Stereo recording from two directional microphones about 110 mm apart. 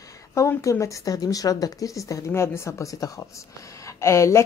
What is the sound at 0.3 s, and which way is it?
A woman's voice, 25° left (ahead or behind).